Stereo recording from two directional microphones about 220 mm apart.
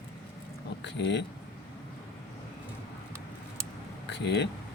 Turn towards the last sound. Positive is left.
turn(degrees=50)  # may be behind; listen again after turning